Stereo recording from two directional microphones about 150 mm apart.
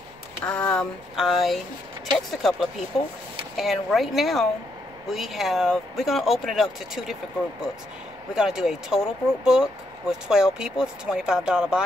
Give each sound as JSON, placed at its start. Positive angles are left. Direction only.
{"t": 0.5, "sound": "speech", "side_deg": 10}
{"t": 2.9, "sound": "speech", "side_deg": 40}
{"t": 3.5, "sound": "speech", "side_deg": 0}
{"t": 8.4, "sound": "speech", "side_deg": -5}